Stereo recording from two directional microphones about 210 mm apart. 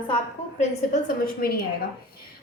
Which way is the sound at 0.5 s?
40° left (ahead or behind).